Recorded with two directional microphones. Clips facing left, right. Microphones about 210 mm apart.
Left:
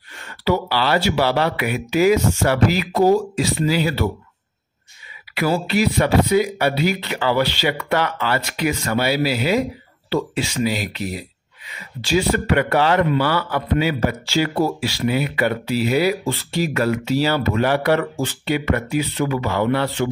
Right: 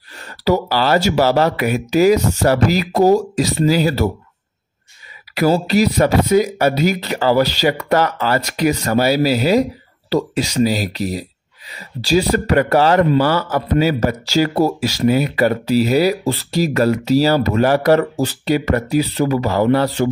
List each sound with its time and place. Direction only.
0.5 s speech: 40° right (ahead or behind)
5.3 s speech: 40° right (ahead or behind)